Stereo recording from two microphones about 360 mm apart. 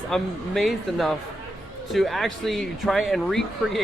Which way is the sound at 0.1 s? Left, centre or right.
Centre.